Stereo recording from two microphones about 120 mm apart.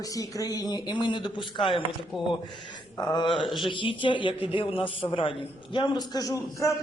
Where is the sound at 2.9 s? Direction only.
35° left (ahead or behind).